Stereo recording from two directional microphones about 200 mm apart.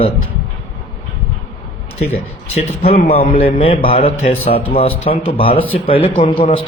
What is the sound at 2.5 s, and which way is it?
A man's voice, 30° left (ahead or behind).